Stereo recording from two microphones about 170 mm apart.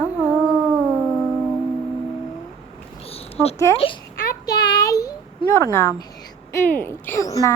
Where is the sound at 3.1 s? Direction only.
35° left (ahead or behind).